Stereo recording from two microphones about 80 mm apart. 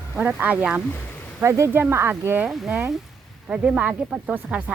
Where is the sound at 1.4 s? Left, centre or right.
Right.